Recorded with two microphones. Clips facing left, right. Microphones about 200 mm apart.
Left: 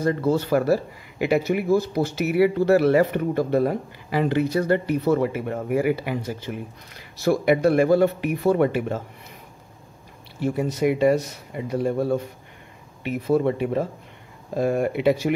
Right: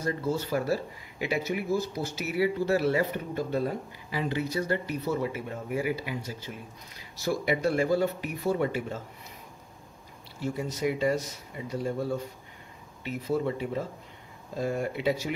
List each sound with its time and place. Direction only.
0.0 s speech: 65° left (ahead or behind)
10.4 s speech: 60° left (ahead or behind)